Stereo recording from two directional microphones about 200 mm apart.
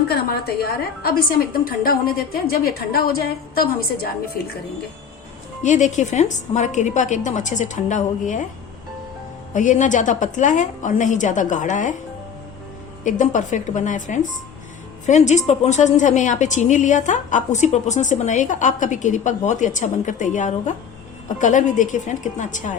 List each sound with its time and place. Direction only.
0.2 s a woman's voice: 50° left (ahead or behind)
5.6 s a woman's voice: 35° left (ahead or behind)
9.5 s a woman's voice: 40° left (ahead or behind)
13.1 s a woman's voice: 40° left (ahead or behind)